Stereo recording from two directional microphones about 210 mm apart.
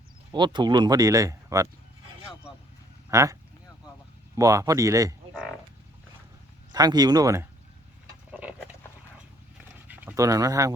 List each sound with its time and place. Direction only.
0.3 s speech: 20° right (ahead or behind)
3.1 s speech: 15° right (ahead or behind)
4.4 s speech: 15° right (ahead or behind)
6.7 s speech: 20° right (ahead or behind)
8.3 s a sound: 5° right (ahead or behind)
9.9 s speech: 10° right (ahead or behind)